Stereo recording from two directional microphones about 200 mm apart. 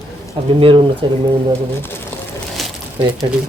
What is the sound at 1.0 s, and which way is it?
Speech, 25° right (ahead or behind).